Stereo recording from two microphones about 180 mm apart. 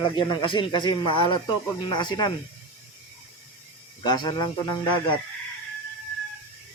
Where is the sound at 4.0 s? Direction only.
25° left (ahead or behind).